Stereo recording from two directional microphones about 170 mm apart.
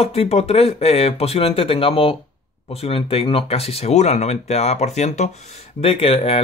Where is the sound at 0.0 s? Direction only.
35° left (ahead or behind).